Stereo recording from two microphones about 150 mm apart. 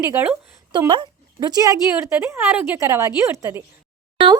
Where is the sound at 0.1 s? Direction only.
10° right (ahead or behind).